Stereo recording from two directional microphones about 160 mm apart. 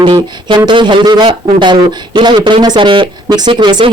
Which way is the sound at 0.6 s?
30° right (ahead or behind).